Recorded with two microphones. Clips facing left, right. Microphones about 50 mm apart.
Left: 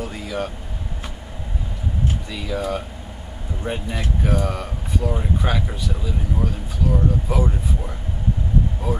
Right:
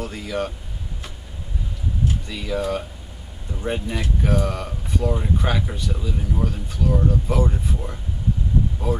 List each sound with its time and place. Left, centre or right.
0.0 s speech: centre
2.2 s speech: centre